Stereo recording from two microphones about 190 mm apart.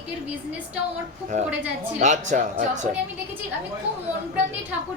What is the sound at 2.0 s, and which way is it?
Speech, 40° right (ahead or behind).